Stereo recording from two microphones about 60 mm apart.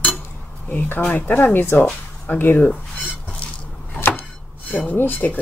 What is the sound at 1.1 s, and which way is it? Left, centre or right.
Speech, left.